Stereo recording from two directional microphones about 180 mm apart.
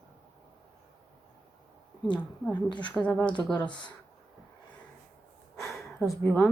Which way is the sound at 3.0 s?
15° left (ahead or behind).